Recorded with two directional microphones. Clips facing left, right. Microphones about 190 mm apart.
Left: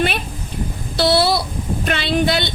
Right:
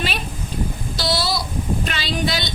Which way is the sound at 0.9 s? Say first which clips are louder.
Left 8 dB; 60° left (ahead or behind).